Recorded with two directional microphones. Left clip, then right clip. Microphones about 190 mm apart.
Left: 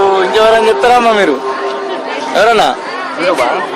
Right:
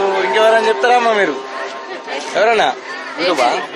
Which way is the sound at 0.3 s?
35° left (ahead or behind).